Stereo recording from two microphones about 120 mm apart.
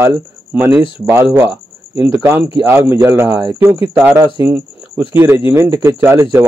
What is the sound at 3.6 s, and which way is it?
Speech, 15° right (ahead or behind).